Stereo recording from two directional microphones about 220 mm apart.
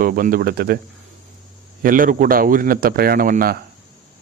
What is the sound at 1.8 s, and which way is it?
A man's voice, 40° right (ahead or behind).